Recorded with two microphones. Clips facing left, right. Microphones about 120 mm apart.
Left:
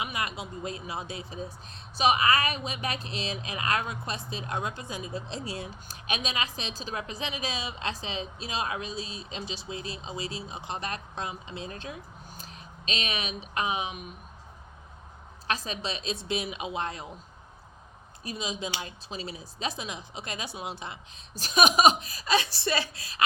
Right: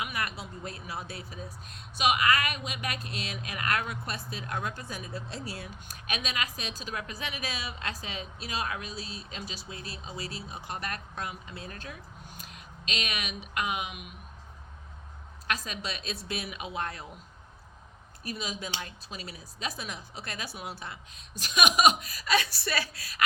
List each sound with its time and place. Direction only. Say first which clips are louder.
0.0 s speech: left 2 dB; 20° left (ahead or behind)
15.4 s speech: left 2 dB; 30° left (ahead or behind)
18.2 s speech: left 2 dB; 25° left (ahead or behind)
21.3 s speech: left 3 dB; 35° left (ahead or behind)